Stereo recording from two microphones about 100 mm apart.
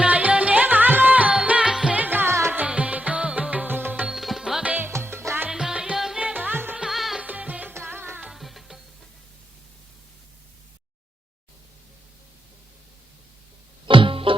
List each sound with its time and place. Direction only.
0.0 s music: 15° right (ahead or behind)
4.1 s music: centre (ahead or behind)
4.9 s music: 25° right (ahead or behind)
5.5 s music: 5° right (ahead or behind)
6.8 s music: centre (ahead or behind)
7.3 s music: 15° right (ahead or behind)
8.2 s music: centre (ahead or behind)
13.8 s music: 60° right (ahead or behind)